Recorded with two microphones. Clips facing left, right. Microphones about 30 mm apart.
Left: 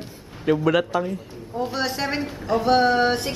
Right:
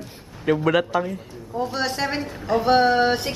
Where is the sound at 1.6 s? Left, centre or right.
Centre.